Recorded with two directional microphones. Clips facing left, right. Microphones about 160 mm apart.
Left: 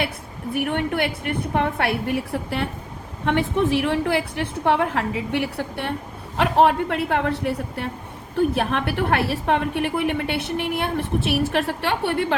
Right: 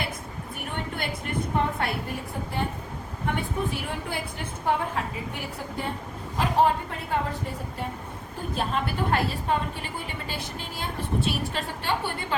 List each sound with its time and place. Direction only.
0.5 s a woman's voice: 70° left (ahead or behind)